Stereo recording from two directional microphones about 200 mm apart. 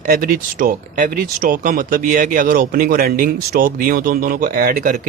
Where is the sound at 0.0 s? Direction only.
45° right (ahead or behind).